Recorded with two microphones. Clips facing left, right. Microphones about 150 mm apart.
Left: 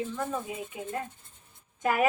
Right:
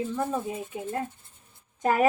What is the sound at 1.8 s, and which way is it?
Speech, 35° right (ahead or behind).